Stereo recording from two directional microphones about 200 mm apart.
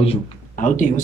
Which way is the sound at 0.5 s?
40° left (ahead or behind).